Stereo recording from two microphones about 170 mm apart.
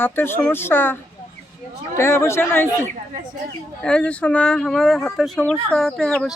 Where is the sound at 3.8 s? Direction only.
5° left (ahead or behind).